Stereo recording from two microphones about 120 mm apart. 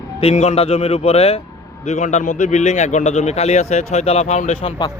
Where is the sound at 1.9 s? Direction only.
80° left.